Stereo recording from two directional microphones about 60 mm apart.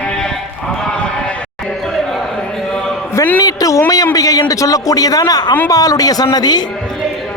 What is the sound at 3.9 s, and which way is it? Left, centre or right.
A man's voice, left.